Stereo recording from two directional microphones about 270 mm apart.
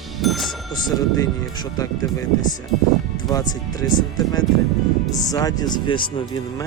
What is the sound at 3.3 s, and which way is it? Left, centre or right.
Speech, centre.